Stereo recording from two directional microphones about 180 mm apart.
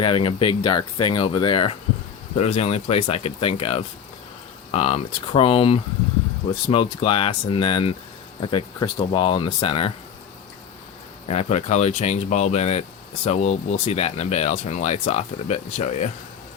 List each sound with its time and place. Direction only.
0.0 s speech: 30° left (ahead or behind)
11.3 s speech: 35° left (ahead or behind)